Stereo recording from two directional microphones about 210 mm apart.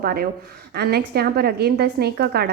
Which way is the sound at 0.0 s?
45° right (ahead or behind).